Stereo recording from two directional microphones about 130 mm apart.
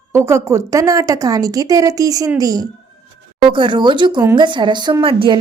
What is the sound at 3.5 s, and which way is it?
A woman's voice, 40° right (ahead or behind).